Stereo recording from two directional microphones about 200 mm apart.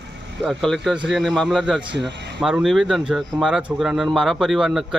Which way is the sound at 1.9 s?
60° right (ahead or behind).